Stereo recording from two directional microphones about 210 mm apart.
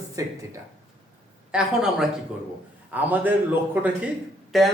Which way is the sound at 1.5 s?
5° right (ahead or behind).